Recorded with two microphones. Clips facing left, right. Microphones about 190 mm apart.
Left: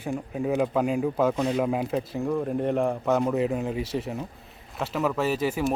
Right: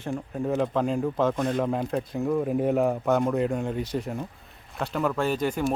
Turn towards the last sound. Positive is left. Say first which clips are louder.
# even
turn(degrees=5)  # may be behind; listen again after turning